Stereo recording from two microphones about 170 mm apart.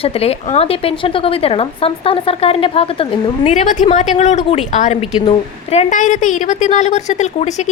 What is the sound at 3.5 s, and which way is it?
A woman's voice, 45° left (ahead or behind).